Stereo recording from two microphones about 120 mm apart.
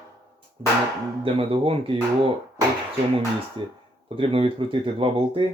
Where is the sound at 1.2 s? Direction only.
50° right (ahead or behind).